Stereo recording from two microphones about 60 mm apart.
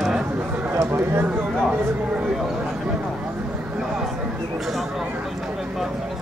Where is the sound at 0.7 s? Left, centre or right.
Right.